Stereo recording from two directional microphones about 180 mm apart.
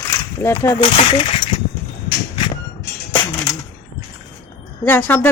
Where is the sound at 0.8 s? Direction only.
30° left (ahead or behind).